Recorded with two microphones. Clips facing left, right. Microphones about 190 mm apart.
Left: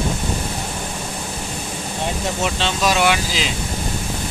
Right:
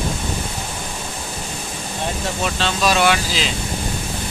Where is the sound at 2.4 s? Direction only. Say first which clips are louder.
Right 1 dB; 20° left (ahead or behind).